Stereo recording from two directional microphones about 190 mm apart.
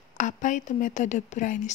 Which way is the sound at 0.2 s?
40° left (ahead or behind).